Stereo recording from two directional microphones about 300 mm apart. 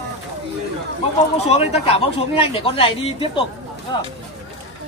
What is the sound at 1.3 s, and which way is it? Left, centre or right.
Speech, left.